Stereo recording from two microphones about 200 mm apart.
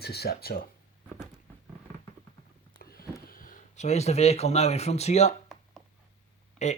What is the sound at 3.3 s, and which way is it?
Speech, 45° left (ahead or behind).